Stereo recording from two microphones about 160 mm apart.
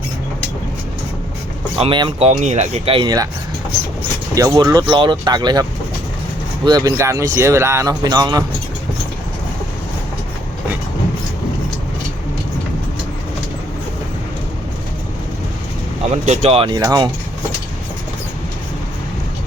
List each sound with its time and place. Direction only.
1.8 s speech: 30° right (ahead or behind)
4.4 s speech: 25° right (ahead or behind)
6.7 s speech: 25° right (ahead or behind)
16.2 s speech: 45° right (ahead or behind); by 17.1 s 25° right (ahead or behind)